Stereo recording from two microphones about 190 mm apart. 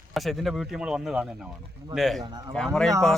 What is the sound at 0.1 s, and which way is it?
Speech, centre (ahead or behind).